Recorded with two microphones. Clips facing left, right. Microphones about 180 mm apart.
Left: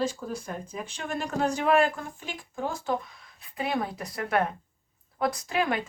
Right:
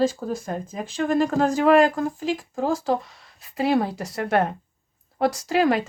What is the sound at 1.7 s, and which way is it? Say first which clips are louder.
Speech: right 5 dB; 35° right (ahead or behind).